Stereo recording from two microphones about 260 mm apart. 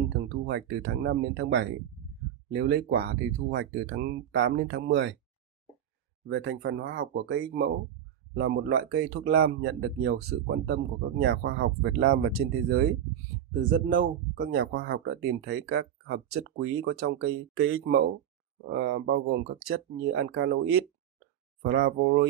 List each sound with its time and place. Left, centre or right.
0.2 s speech: right
6.2 s speech: right
17.2 s speech: right